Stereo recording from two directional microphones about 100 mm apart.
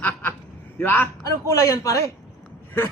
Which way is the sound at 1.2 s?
35° left (ahead or behind).